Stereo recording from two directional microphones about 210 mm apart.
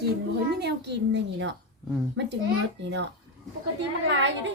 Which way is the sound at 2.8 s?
55° right (ahead or behind).